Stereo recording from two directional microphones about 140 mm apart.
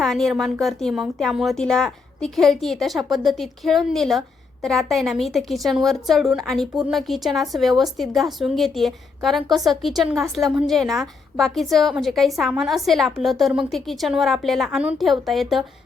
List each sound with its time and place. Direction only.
0.0 s a woman's voice: centre (ahead or behind)